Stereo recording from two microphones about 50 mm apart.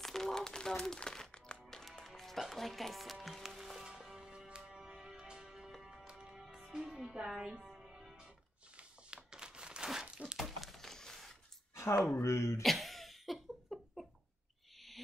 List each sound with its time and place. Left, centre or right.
0.0 s music: centre
4.3 s music: centre
6.4 s music: centre
8.7 s crumpling: centre
10.1 s thunk: centre
10.4 s a sound: centre
11.7 s speech: left
12.6 s a sound: centre